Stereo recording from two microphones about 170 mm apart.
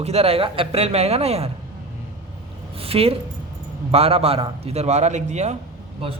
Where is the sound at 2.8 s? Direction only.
35° right (ahead or behind).